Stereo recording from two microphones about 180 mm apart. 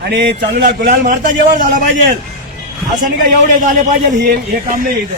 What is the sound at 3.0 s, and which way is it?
Speech, 50° right (ahead or behind).